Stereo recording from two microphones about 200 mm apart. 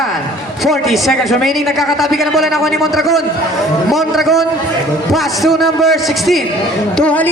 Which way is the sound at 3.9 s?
Centre (ahead or behind).